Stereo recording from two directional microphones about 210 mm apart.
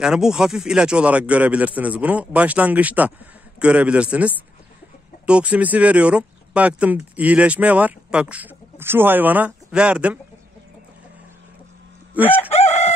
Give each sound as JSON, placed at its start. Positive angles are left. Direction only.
{"t": 0.0, "sound": "a man's voice", "side_deg": -5}
{"t": 12.4, "sound": "chicken", "side_deg": 30}